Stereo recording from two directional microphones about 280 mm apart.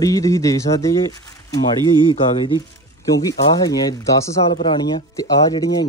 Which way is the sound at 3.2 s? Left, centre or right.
Centre.